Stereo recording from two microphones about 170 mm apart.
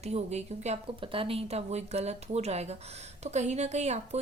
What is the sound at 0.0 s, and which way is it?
A woman's voice, 40° right (ahead or behind).